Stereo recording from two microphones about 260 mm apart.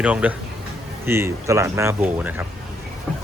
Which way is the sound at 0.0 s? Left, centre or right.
Centre.